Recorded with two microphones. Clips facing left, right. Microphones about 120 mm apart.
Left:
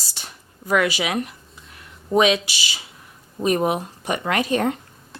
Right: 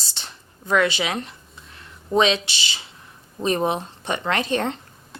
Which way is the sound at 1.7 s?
30° right (ahead or behind).